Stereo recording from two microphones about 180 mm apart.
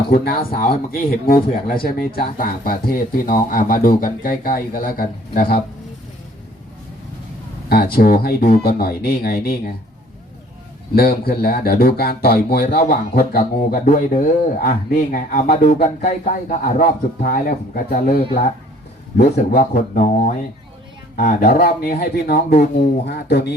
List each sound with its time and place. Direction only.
0.1 s speech: 55° left (ahead or behind)
7.7 s speech: 55° left (ahead or behind)
10.9 s speech: 55° left (ahead or behind)